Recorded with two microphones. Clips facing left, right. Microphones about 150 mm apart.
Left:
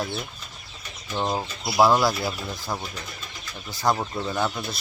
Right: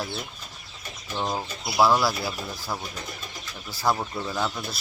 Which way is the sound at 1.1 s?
10° left (ahead or behind).